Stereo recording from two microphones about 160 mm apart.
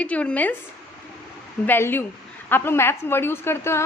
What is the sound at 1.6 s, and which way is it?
A woman's voice, 15° left (ahead or behind).